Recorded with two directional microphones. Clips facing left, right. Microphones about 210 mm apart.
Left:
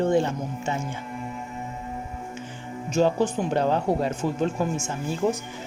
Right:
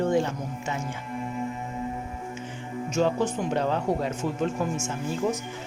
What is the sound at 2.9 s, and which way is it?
Speech, 35° left (ahead or behind).